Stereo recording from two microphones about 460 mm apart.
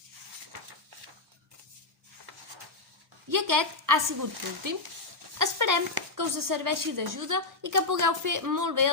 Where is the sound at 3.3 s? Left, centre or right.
Right.